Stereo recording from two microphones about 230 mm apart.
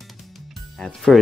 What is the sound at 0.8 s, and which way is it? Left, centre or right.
Speech, centre.